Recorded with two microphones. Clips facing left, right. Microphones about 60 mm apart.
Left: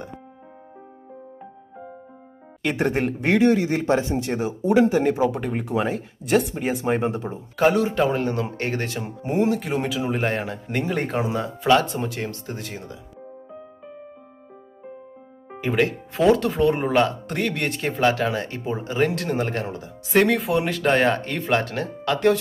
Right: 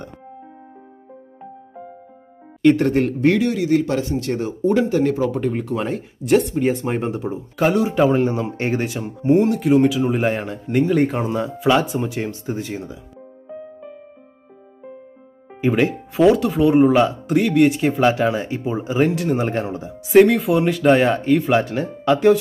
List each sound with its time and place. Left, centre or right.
2.8 s speech: centre
3.3 s speech: left; by 7.9 s centre
7.9 s speech: centre
9.0 s speech: centre
15.6 s speech: centre